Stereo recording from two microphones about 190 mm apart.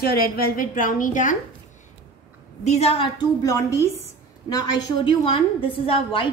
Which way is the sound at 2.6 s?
35° left (ahead or behind).